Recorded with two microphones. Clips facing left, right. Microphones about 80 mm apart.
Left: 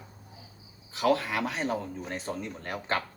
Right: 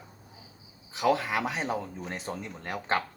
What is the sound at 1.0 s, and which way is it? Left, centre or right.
A man's voice, centre.